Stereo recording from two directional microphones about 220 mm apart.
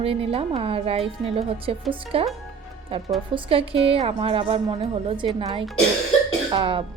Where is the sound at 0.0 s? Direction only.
25° right (ahead or behind).